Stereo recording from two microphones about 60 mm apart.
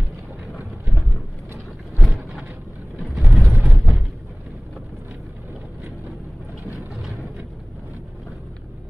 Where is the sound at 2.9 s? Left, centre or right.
Centre.